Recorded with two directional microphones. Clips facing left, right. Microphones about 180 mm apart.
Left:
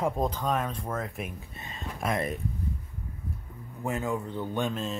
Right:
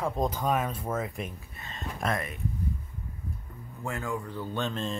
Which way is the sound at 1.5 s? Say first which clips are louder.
Left 2 dB; 25° left (ahead or behind).